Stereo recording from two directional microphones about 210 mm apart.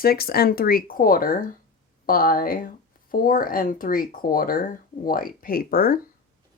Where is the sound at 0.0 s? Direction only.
45° left (ahead or behind).